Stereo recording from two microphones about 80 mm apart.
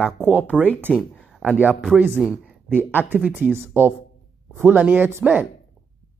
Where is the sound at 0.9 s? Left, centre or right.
Centre.